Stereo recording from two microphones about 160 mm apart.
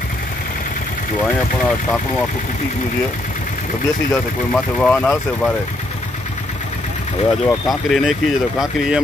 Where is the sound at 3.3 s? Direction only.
55° left (ahead or behind).